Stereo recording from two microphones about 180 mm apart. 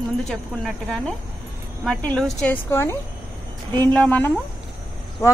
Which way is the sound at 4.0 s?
10° left (ahead or behind).